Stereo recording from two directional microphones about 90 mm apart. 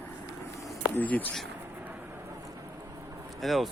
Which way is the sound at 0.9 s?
20° left (ahead or behind).